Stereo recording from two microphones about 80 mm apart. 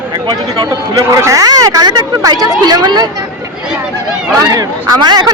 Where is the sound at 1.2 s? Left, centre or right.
Right.